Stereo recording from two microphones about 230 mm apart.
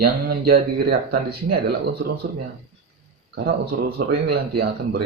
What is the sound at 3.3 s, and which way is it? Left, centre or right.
Speech, right.